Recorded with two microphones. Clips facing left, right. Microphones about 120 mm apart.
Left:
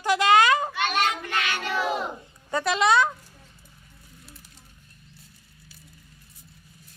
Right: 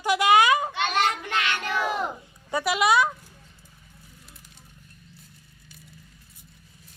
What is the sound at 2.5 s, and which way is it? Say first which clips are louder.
Speech: even; 10° right (ahead or behind).